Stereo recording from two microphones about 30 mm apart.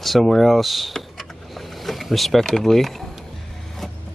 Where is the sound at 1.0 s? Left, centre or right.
Centre.